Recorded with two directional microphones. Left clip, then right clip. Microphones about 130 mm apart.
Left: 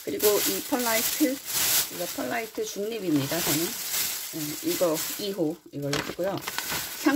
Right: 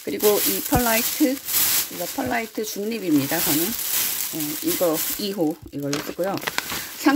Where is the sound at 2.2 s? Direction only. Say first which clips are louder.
Right 6 dB; 35° right (ahead or behind).